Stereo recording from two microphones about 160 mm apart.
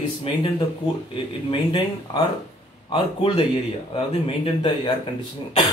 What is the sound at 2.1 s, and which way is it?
Speech, 30° left (ahead or behind).